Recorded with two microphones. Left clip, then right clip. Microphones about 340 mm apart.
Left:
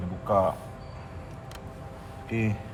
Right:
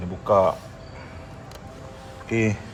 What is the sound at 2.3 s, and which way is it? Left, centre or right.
Speech, right.